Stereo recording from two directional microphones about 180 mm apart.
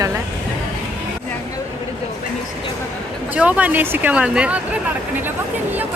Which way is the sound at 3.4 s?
10° right (ahead or behind).